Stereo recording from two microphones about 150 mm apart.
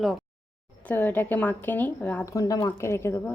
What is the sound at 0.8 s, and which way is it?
Speech, 10° left (ahead or behind).